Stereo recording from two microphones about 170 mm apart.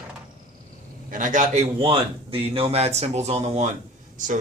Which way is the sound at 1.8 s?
35° right (ahead or behind).